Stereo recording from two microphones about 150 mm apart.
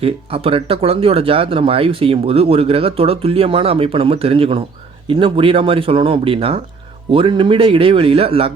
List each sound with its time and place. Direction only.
0.0 s speech: 40° right (ahead or behind)